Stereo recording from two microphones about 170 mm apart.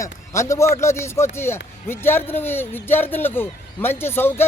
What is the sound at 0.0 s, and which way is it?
A man's voice, 15° left (ahead or behind).